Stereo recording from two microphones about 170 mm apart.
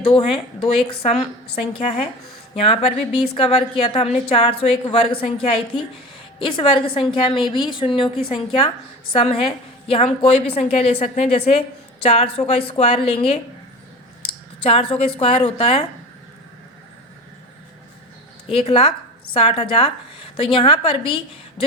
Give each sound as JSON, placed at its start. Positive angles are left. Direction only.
{"t": 0.0, "sound": "a woman's voice", "side_deg": 35}
{"t": 14.6, "sound": "a woman's voice", "side_deg": 35}
{"t": 18.5, "sound": "a woman's voice", "side_deg": 35}